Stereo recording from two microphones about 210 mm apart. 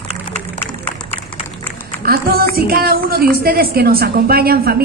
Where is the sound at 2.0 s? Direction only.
45° right (ahead or behind).